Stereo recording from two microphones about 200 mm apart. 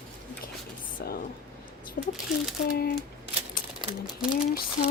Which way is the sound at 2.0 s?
45° left (ahead or behind).